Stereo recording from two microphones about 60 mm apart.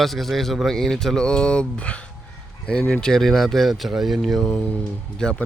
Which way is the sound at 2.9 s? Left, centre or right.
Centre.